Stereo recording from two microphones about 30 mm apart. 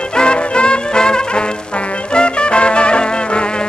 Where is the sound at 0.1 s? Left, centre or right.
Left.